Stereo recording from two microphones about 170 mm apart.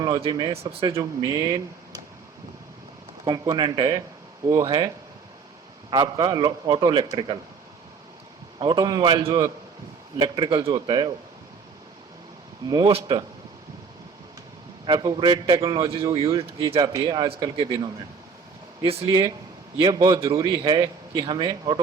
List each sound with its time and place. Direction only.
0.3 s a man's voice: 20° right (ahead or behind)
3.2 s a man's voice: 25° right (ahead or behind)
5.9 s a man's voice: 25° right (ahead or behind)
8.5 s a man's voice: 25° right (ahead or behind)
12.6 s a man's voice: 25° right (ahead or behind)
14.8 s a man's voice: 25° right (ahead or behind)
19.0 s a man's voice: 25° right (ahead or behind)